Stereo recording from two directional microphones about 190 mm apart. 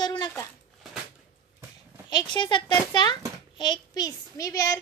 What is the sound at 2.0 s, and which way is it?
A child's voice, 25° left (ahead or behind).